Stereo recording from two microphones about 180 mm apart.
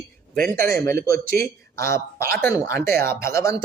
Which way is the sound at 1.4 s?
15° left (ahead or behind).